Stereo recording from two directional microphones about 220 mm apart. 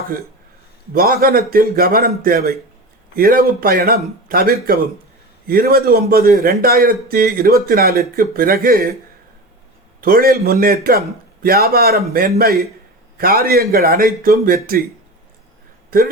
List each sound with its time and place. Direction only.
0.9 s a man's voice: 40° right (ahead or behind)
10.0 s a man's voice: 40° right (ahead or behind)